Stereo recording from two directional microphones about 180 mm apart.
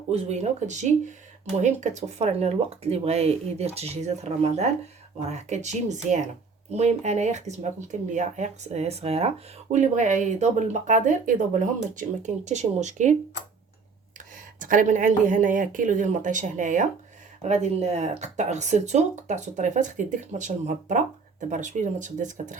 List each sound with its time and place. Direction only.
0.1 s speech: 35° right (ahead or behind)
14.3 s speech: 45° right (ahead or behind)